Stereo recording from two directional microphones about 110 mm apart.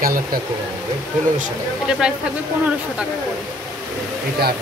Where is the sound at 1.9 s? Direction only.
5° right (ahead or behind).